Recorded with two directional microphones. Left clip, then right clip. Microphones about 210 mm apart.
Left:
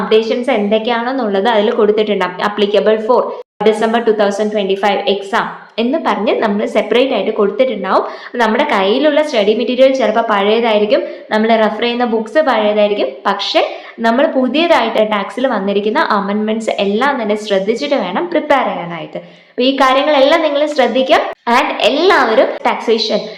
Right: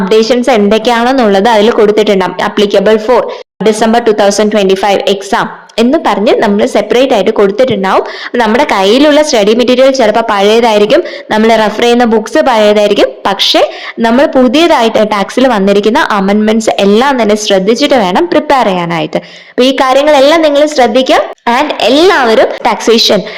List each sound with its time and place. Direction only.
0.1 s speech: 45° right (ahead or behind)